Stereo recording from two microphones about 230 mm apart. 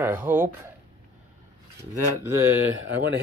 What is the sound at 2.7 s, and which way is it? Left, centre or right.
Speech, right.